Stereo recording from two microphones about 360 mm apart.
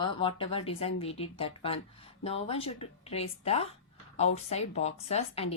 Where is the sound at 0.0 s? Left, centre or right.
Centre.